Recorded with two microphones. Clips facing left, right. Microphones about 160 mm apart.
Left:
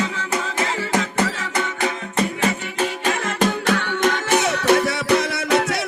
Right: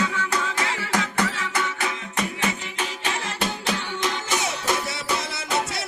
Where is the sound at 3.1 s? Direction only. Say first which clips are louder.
Left 7 dB; 50° left (ahead or behind).